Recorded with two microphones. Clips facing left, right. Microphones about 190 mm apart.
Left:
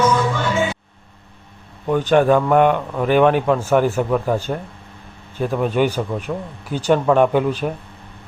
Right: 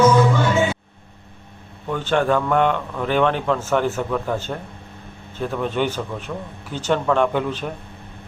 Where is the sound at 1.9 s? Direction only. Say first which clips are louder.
Left 5 dB; 15° left (ahead or behind).